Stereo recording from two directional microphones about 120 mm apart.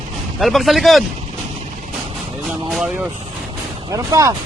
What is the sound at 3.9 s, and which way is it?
Speech, 25° right (ahead or behind).